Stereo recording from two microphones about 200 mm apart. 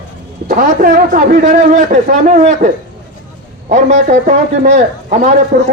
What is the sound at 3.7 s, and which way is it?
A man's voice, 35° right (ahead or behind).